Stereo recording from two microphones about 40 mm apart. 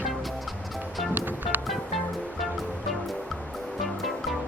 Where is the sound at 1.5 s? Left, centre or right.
Right.